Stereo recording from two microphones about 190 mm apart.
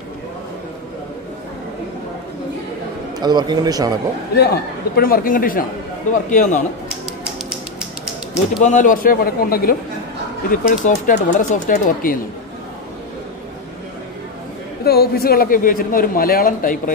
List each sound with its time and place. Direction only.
3.2 s a man's voice: 20° right (ahead or behind)
4.4 s a man's voice: 55° left (ahead or behind)
8.6 s a man's voice: 40° left (ahead or behind)
14.9 s a man's voice: 55° left (ahead or behind)